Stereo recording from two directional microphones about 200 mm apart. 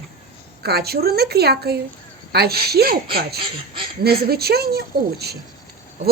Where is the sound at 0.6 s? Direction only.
50° right (ahead or behind).